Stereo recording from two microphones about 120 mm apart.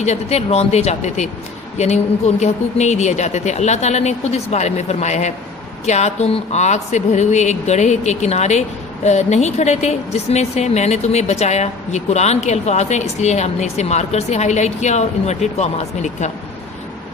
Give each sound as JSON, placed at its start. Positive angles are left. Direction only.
{"t": 0.0, "sound": "a woman's voice", "side_deg": 65}